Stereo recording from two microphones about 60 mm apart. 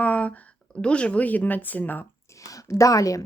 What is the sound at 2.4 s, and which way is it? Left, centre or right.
Speech, left.